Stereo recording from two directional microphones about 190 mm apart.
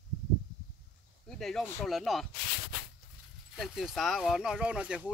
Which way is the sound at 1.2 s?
Centre (ahead or behind).